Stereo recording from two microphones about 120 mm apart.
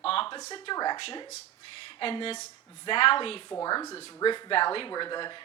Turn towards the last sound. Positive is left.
turn(degrees=40)  # may be behind; listen again after turning